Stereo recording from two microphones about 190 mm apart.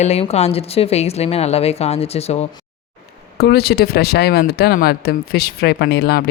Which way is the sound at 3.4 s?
55° left (ahead or behind).